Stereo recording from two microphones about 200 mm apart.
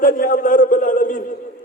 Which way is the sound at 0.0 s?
45° left (ahead or behind).